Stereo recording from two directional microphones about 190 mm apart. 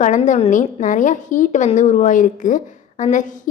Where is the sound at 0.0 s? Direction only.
40° left (ahead or behind).